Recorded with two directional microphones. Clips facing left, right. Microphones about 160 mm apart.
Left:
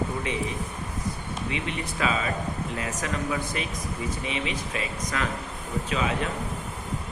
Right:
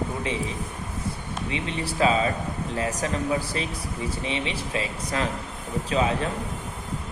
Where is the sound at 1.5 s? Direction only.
30° right (ahead or behind).